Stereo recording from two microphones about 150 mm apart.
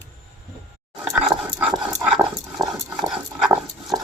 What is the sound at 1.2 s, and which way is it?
Dog, 5° right (ahead or behind).